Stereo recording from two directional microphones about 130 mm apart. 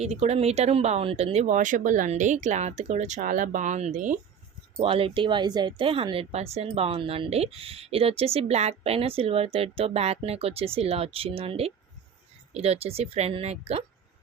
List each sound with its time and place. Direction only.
0.0 s speech: 55° right (ahead or behind); by 4.2 s 80° right
4.8 s speech: 45° right (ahead or behind)